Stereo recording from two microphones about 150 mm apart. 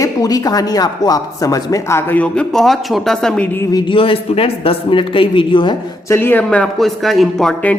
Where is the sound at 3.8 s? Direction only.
35° left (ahead or behind).